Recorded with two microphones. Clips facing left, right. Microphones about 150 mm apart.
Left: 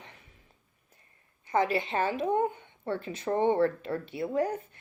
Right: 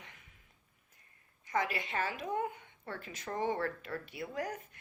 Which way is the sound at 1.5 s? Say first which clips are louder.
Left 8 dB; 30° left (ahead or behind).